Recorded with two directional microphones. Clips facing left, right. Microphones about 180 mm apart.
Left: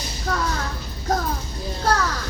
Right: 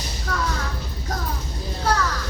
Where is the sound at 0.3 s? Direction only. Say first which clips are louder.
Left 2 dB; 45° left (ahead or behind).